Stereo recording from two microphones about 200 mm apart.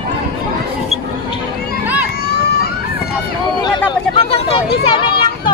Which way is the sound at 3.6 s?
25° left (ahead or behind).